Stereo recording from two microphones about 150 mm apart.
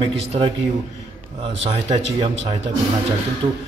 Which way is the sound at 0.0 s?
40° right (ahead or behind).